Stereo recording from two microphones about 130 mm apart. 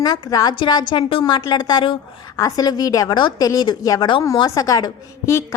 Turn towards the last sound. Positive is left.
turn(degrees=25)  # may be behind; listen again after turning